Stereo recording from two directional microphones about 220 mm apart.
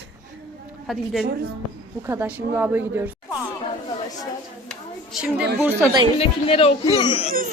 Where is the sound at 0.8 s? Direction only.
Centre (ahead or behind).